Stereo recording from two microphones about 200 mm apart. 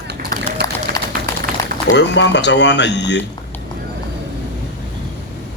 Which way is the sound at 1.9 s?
60° left (ahead or behind).